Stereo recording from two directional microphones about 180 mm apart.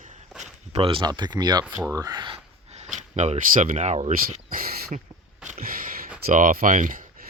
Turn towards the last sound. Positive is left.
turn(degrees=-45)  # may be behind; listen again after turning